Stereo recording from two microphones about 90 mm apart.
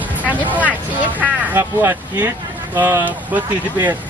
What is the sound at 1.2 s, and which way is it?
Speech, 30° right (ahead or behind).